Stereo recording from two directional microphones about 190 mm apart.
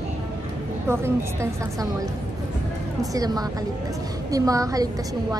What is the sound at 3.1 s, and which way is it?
A woman's voice, 20° right (ahead or behind).